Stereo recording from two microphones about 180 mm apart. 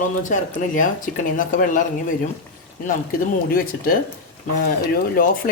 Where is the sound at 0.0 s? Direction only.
45° left (ahead or behind).